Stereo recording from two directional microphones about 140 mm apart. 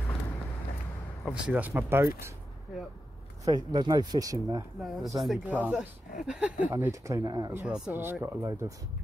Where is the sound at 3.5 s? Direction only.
30° right (ahead or behind).